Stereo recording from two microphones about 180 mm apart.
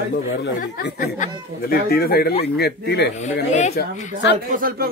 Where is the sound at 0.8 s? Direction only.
45° left (ahead or behind); by 3.1 s 65° left (ahead or behind).